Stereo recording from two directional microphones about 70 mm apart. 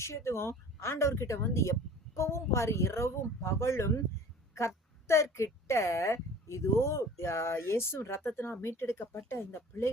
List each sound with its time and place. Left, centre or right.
0.0 s a woman's voice: left